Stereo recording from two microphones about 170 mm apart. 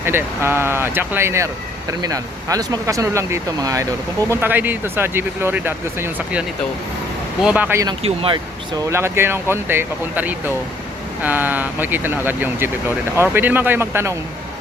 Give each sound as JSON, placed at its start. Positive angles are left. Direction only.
{"t": 0.0, "sound": "speech", "side_deg": -15}
{"t": 7.4, "sound": "speech", "side_deg": -10}
{"t": 8.0, "sound": "speech", "side_deg": -35}
{"t": 8.9, "sound": "speech", "side_deg": -15}